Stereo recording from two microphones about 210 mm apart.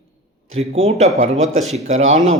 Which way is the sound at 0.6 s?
30° right (ahead or behind).